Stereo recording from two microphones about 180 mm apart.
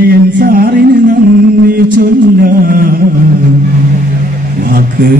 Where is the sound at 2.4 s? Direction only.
50° right (ahead or behind).